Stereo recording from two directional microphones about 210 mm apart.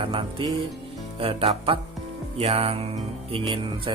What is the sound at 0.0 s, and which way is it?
Speech, 25° right (ahead or behind).